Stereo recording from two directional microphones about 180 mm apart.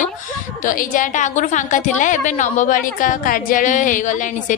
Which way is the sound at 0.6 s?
45° left (ahead or behind).